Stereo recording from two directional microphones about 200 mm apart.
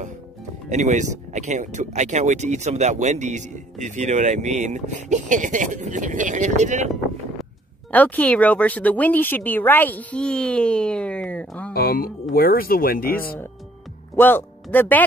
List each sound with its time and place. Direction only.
0.7 s speech: 35° right (ahead or behind)
7.9 s speech: 10° left (ahead or behind)
11.7 s speech: 50° left (ahead or behind)
14.1 s speech: 10° left (ahead or behind)